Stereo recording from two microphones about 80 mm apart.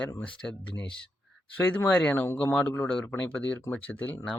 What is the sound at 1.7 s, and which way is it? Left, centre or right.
Speech, centre.